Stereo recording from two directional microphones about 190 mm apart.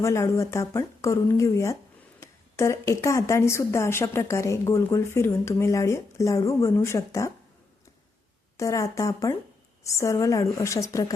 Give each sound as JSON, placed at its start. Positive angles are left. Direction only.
{"t": 0.0, "sound": "a woman's voice", "side_deg": 15}
{"t": 8.5, "sound": "a woman's voice", "side_deg": 15}